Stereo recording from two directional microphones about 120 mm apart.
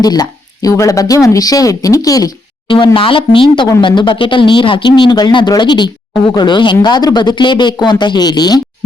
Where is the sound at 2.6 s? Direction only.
45° left (ahead or behind).